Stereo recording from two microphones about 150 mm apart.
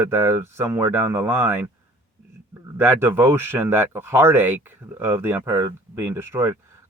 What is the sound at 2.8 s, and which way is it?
Speech, 15° right (ahead or behind).